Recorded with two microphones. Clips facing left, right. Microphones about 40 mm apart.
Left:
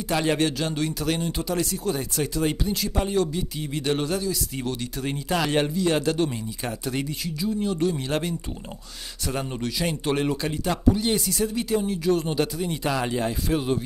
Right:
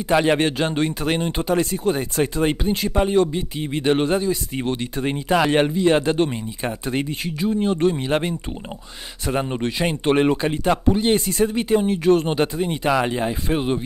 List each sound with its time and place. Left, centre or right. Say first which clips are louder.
0.1 s speech: right 5 dB; right